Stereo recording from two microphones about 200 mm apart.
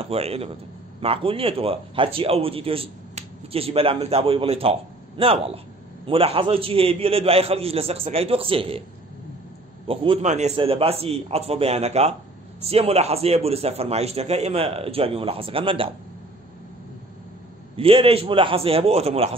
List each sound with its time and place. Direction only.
0.0 s a man's voice: 30° right (ahead or behind)
9.8 s speech: 30° right (ahead or behind)
17.7 s speech: 30° right (ahead or behind)